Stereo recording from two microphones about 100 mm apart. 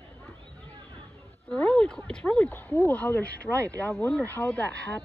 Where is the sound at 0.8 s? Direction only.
45° right (ahead or behind).